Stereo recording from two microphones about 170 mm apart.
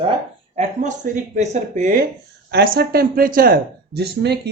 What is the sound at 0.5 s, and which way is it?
Speech, 45° right (ahead or behind).